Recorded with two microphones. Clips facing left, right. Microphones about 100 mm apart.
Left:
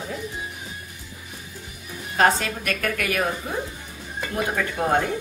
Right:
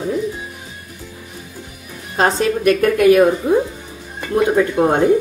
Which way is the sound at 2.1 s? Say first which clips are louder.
Right 4 dB; 25° right (ahead or behind).